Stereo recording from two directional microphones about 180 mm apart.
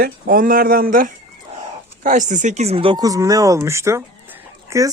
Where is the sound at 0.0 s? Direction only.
50° right (ahead or behind); by 4.0 s 15° right (ahead or behind).